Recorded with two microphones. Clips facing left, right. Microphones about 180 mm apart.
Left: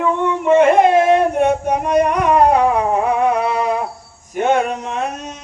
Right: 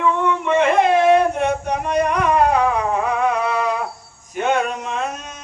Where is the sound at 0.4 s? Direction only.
40° left (ahead or behind).